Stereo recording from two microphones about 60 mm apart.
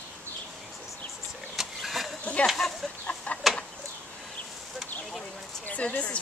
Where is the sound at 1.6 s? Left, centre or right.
Centre.